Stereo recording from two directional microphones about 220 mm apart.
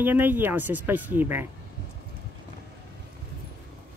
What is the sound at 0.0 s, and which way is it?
Speech, 10° right (ahead or behind).